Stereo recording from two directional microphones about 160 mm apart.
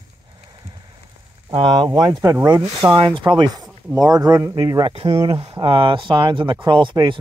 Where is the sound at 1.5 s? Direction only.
30° right (ahead or behind).